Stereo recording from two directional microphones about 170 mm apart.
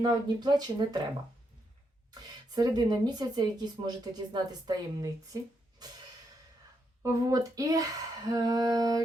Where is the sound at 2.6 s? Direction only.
25° right (ahead or behind).